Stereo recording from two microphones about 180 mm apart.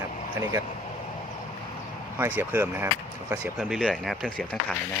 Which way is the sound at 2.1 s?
10° right (ahead or behind).